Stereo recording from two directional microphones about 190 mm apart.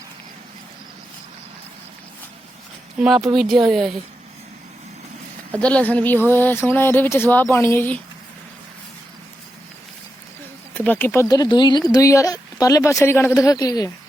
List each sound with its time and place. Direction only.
3.0 s speech: centre (ahead or behind)
5.5 s speech: 5° left (ahead or behind)
10.8 s speech: 10° left (ahead or behind)